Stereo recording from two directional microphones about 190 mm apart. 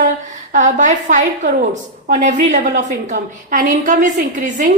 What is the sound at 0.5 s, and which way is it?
A woman's voice, 40° right (ahead or behind).